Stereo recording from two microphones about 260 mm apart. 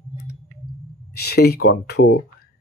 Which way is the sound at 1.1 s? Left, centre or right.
Left.